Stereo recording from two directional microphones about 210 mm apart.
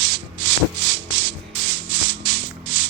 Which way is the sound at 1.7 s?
25° right (ahead or behind).